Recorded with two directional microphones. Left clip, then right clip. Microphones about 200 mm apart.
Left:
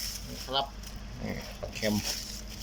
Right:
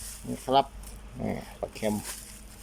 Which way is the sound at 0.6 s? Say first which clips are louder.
Right 7 dB; 40° right (ahead or behind).